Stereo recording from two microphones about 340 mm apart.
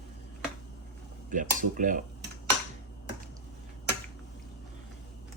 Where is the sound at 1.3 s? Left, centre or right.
Right.